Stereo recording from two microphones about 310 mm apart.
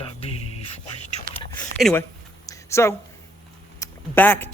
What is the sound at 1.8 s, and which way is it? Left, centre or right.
Speech, centre.